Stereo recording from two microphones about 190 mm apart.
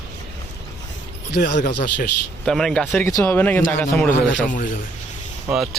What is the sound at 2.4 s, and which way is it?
A man's voice, 5° left (ahead or behind).